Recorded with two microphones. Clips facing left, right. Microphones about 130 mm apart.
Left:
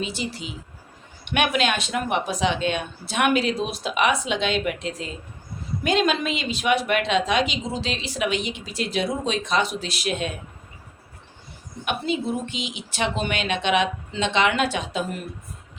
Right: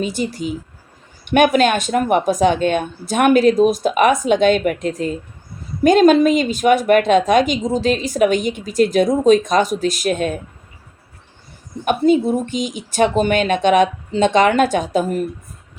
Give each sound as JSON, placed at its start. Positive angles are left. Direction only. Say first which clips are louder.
{"t": 0.0, "sound": "a woman's voice", "louder": "right 8 dB", "side_deg": -45}
{"t": 11.9, "sound": "a woman's voice", "louder": "right 11 dB", "side_deg": -45}